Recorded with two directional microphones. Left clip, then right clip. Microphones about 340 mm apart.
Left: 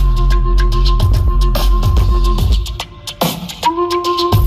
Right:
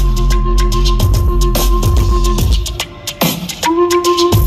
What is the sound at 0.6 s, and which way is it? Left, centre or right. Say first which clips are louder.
Music: right 3 dB; centre.